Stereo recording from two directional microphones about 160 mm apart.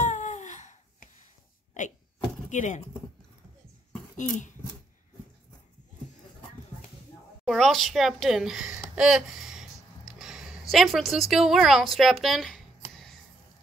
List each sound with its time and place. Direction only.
0.0 s babbling: 50° left (ahead or behind)
2.5 s speech: 50° left (ahead or behind)
4.2 s speech: 50° left (ahead or behind)
7.4 s a sound: centre (ahead or behind)
10.7 s speech: centre (ahead or behind)